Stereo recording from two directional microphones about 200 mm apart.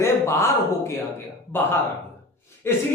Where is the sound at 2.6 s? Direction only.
15° left (ahead or behind).